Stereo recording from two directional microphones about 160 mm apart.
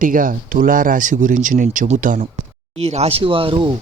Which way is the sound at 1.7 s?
45° right (ahead or behind).